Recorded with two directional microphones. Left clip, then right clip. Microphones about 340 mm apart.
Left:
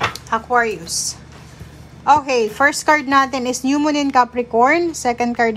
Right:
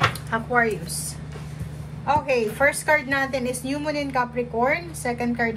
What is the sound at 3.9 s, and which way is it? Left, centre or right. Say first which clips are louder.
Speech: left 7 dB; left.